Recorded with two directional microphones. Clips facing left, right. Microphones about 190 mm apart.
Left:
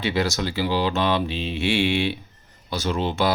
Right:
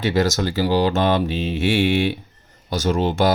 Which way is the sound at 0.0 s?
45° right (ahead or behind).